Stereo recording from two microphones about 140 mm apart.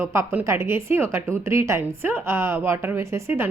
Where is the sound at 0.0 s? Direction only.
20° right (ahead or behind).